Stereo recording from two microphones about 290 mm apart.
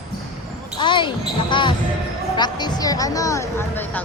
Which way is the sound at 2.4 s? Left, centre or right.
Centre.